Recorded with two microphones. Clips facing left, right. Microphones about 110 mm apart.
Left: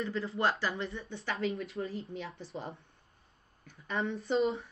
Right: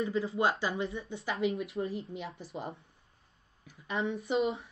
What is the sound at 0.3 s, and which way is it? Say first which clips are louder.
Speech: right 1 dB; 25° right (ahead or behind).